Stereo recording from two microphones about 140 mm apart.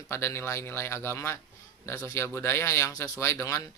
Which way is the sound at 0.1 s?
20° left (ahead or behind).